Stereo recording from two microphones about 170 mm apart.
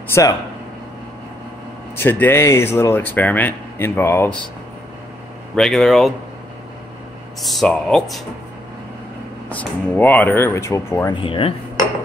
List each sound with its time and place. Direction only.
0.1 s speech: 20° left (ahead or behind)
2.0 s speech: 10° left (ahead or behind)
5.6 s speech: 5° left (ahead or behind)
7.4 s speech: 5° left (ahead or behind)
9.5 s speech: 10° left (ahead or behind)
11.1 s dishes: 30° left (ahead or behind)